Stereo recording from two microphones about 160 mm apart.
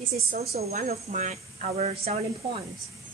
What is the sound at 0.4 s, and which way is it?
A woman's voice, 40° right (ahead or behind).